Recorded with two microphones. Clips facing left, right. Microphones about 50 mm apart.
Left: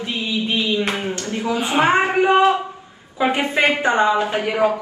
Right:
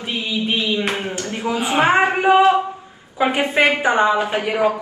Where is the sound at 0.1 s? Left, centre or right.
Right.